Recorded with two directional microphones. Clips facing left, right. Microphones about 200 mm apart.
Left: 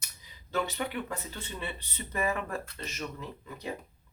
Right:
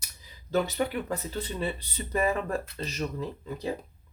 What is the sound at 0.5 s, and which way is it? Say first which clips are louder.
Speech: right 5 dB; 35° right (ahead or behind).